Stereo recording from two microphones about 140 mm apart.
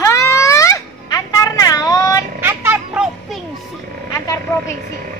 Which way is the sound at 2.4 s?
15° right (ahead or behind).